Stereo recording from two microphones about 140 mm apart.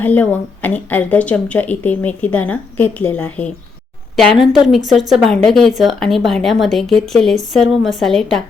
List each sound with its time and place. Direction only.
0.0 s speech: 10° left (ahead or behind)
4.4 s a woman's voice: 5° right (ahead or behind)